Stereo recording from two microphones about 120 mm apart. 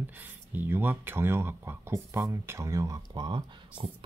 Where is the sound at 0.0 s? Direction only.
15° right (ahead or behind).